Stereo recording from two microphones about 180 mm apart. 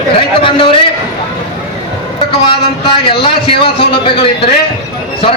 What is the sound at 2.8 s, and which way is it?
A man's voice, 30° left (ahead or behind).